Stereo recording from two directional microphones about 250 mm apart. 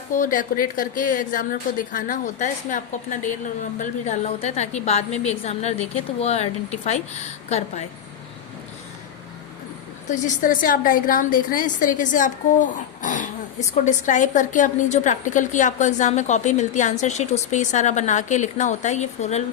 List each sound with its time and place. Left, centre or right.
0.2 s a woman's voice: left
10.1 s a woman's voice: left